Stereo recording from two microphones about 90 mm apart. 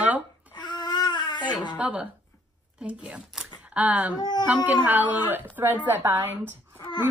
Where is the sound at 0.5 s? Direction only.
55° left (ahead or behind).